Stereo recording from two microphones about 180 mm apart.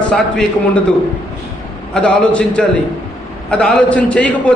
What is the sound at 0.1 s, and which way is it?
Speech, 5° left (ahead or behind).